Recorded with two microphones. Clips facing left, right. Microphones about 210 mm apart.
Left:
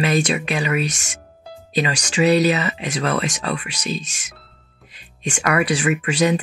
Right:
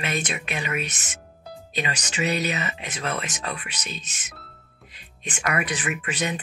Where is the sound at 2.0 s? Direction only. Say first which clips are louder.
Left 12 dB; 80° left.